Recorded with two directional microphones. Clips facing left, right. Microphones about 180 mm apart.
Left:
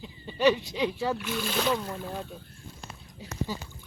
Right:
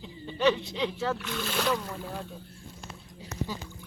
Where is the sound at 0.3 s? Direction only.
10° left (ahead or behind).